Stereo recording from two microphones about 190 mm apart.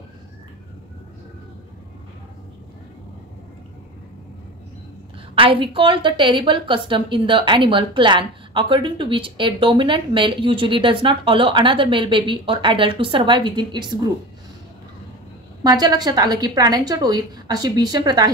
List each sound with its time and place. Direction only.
5.3 s a woman's voice: 30° right (ahead or behind)
15.6 s a woman's voice: 20° right (ahead or behind)